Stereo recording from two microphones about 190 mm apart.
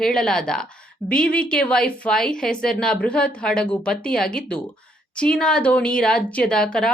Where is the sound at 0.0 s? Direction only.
5° left (ahead or behind).